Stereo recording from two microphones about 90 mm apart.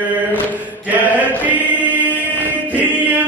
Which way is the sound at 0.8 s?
20° right (ahead or behind).